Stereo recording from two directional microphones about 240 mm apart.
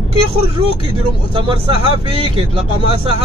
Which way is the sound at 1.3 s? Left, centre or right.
Right.